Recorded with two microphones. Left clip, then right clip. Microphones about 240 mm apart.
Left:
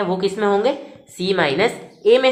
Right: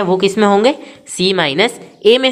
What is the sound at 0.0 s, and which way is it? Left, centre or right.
A woman's voice, right.